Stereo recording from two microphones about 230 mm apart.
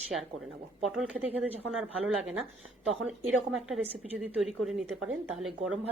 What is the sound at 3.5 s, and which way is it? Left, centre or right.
Speech, centre.